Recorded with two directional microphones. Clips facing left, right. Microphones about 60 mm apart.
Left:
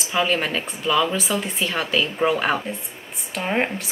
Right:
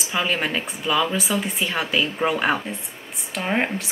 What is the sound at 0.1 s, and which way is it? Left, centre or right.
A woman's voice, centre.